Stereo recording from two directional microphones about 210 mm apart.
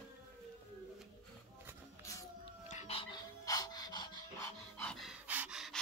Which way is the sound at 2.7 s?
30° left (ahead or behind).